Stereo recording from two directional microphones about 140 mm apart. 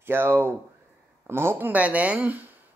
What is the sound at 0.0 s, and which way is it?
Speech, 15° right (ahead or behind).